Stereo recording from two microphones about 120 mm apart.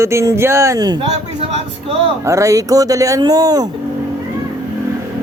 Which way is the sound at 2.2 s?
25° right (ahead or behind).